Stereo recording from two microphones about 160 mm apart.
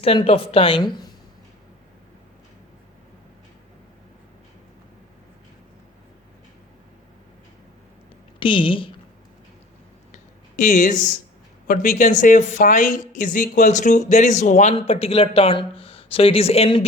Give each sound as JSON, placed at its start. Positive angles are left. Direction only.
{"t": 0.0, "sound": "speech", "side_deg": 35}
{"t": 8.4, "sound": "speech", "side_deg": 30}
{"t": 10.6, "sound": "speech", "side_deg": 55}